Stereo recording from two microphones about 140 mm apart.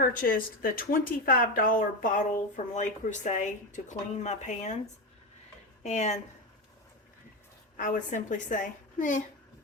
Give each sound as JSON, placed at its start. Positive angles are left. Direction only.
{"t": 0.0, "sound": "speech", "side_deg": 90}
{"t": 2.7, "sound": "speech", "side_deg": 60}
{"t": 5.8, "sound": "speech", "side_deg": 55}
{"t": 7.8, "sound": "a woman's voice", "side_deg": 65}